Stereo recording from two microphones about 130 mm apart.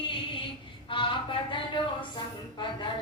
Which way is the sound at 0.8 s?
40° left (ahead or behind).